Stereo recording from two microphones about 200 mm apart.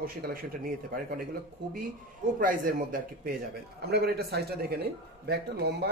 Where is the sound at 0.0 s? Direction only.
45° right (ahead or behind).